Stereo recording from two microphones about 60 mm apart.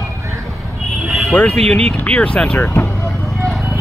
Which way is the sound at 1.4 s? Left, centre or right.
Centre.